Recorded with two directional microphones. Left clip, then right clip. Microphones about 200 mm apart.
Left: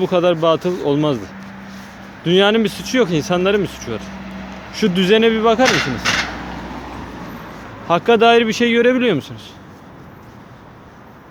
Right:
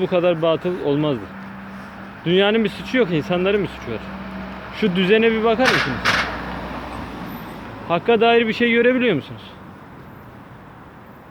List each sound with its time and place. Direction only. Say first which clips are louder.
0.0 s speech: left 3 dB; 20° left (ahead or behind)
2.2 s speech: left 3 dB; 20° left (ahead or behind)
4.4 s vehicle: even; centre (ahead or behind)
4.9 s speech: left 2 dB; 20° left (ahead or behind)
5.6 s speech: left 2 dB; 10° right (ahead or behind)
7.2 s vehicle: left 1 dB; 50° right (ahead or behind)
7.9 s speech: left 4 dB; 20° left (ahead or behind)